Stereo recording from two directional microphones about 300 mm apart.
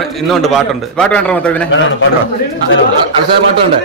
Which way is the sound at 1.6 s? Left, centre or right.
Left.